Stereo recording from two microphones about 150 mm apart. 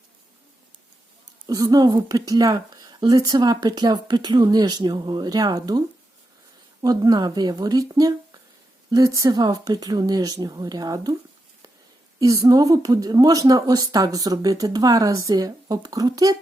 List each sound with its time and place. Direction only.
1.5 s speech: 25° right (ahead or behind)
6.8 s speech: 25° right (ahead or behind)
12.2 s speech: 25° right (ahead or behind)